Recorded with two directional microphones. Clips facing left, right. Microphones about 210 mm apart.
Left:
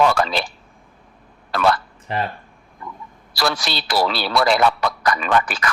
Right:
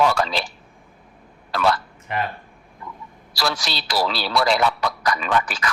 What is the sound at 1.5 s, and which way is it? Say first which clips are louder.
Speech: left 2 dB; 55° left (ahead or behind).